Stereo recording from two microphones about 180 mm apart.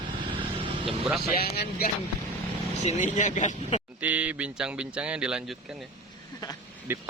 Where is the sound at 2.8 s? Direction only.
45° left (ahead or behind).